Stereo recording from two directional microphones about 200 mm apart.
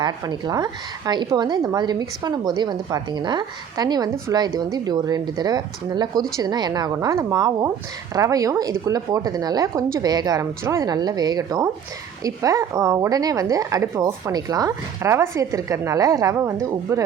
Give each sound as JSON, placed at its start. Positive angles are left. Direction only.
{"t": 0.0, "sound": "a woman's voice", "side_deg": -20}